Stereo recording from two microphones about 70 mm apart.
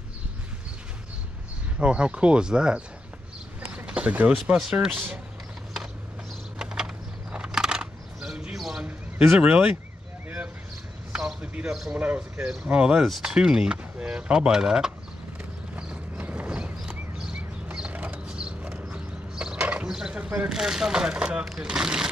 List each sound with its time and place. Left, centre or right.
1.8 s speech: centre
6.6 s a sound: centre
9.4 s speech: centre
11.1 s basketball bounce: centre
11.9 s speech: centre
13.0 s speech: centre
15.7 s clip-clop: right
17.7 s a sound: centre
18.2 s horse: centre
20.2 s speech: centre